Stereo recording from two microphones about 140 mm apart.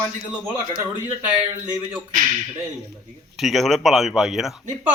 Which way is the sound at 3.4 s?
Centre (ahead or behind).